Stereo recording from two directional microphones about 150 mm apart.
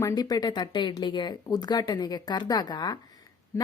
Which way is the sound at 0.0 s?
25° left (ahead or behind).